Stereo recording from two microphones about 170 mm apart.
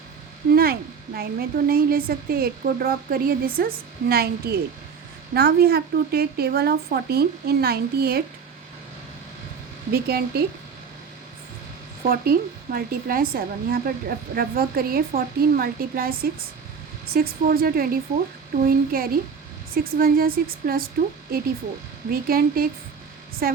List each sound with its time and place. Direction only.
0.5 s a woman's voice: 60° right (ahead or behind)
9.9 s a woman's voice: 65° right (ahead or behind)
12.0 s a woman's voice: 60° right (ahead or behind)
22.1 s a woman's voice: 60° right (ahead or behind)